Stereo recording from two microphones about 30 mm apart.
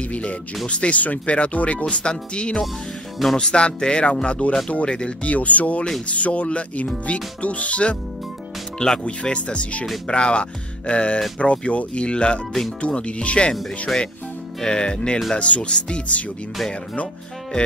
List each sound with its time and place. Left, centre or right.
0.0 s speech: left
3.2 s speech: centre
3.5 s speech: left
5.2 s speech: left
8.7 s speech: left
9.0 s speech: left
10.0 s speech: left
14.6 s speech: left
15.3 s speech: left
17.5 s music: left